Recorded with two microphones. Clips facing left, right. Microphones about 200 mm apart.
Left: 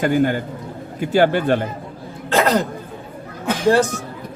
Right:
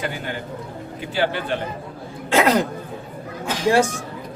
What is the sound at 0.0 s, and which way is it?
A man's voice, 45° left (ahead or behind).